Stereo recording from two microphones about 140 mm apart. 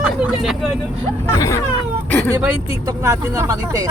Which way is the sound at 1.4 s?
20° left (ahead or behind).